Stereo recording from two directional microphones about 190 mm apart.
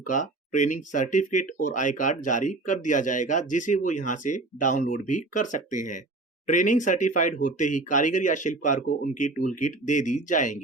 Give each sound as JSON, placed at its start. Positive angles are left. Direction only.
{"t": 0.0, "sound": "speech", "side_deg": 40}